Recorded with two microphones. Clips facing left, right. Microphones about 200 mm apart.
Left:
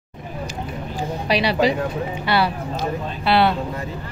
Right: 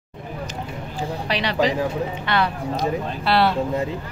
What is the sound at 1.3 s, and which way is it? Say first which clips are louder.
A woman's voice: left 3 dB; 10° left (ahead or behind).